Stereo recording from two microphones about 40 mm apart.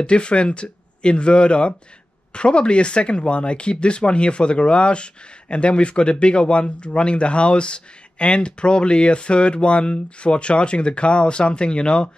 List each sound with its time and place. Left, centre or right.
0.0 s speech: left